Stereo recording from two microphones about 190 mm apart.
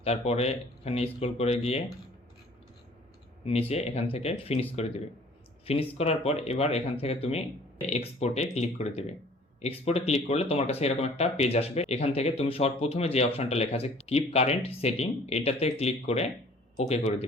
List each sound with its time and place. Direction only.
0.0 s speech: 35° left (ahead or behind)
3.7 s speech: 35° left (ahead or behind)